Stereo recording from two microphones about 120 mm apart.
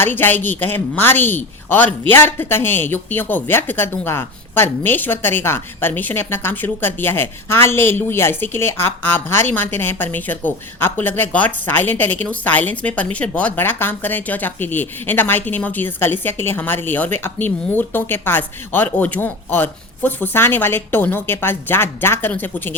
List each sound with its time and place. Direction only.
0.0 s a woman's voice: 15° left (ahead or behind)